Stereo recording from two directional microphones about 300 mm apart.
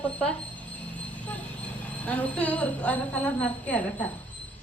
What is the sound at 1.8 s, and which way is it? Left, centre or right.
A woman's voice, centre.